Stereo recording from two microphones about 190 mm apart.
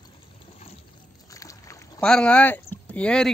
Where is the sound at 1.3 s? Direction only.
15° left (ahead or behind).